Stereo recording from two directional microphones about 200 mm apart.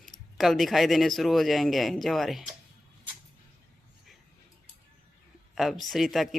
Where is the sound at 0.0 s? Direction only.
Centre (ahead or behind).